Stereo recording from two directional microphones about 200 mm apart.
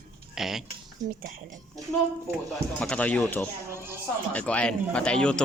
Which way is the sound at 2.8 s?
5° left (ahead or behind).